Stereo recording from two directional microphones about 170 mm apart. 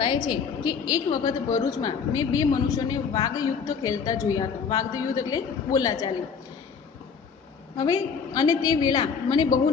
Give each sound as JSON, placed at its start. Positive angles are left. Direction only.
{"t": 0.0, "sound": "a woman's voice", "side_deg": 25}
{"t": 7.8, "sound": "a woman's voice", "side_deg": 20}